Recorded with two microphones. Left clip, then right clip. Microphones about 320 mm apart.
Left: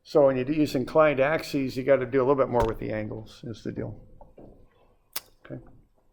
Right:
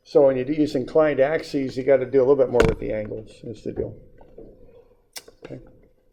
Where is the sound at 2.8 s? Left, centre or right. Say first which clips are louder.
Right 5 dB; left.